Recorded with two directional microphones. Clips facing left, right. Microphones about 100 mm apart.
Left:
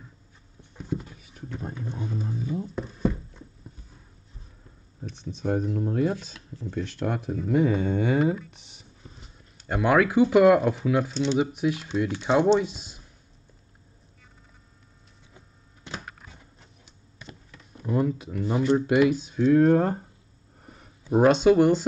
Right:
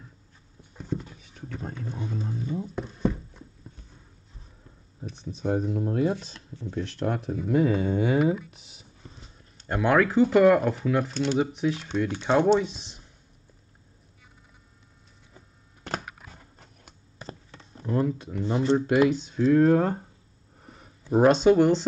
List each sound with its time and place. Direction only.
0.7 s dog: 5° left (ahead or behind)
1.6 s speech: 10° left (ahead or behind)
2.6 s a sound: centre (ahead or behind)
5.0 s speech: centre (ahead or behind)
17.2 s a sound: 35° right (ahead or behind)
17.8 s speech: 5° left (ahead or behind)